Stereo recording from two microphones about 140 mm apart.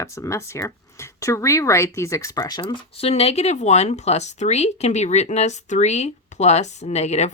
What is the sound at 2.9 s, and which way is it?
Speech, 45° left (ahead or behind).